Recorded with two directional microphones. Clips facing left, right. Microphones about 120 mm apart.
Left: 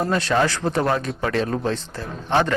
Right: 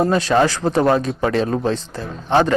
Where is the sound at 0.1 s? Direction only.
15° right (ahead or behind).